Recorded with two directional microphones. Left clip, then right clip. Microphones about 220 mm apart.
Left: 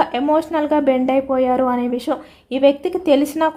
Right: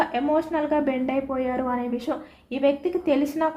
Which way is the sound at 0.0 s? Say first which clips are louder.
Left 6 dB; 45° left (ahead or behind).